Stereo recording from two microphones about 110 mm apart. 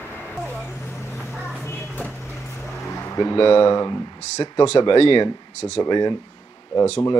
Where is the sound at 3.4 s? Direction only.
50° left (ahead or behind).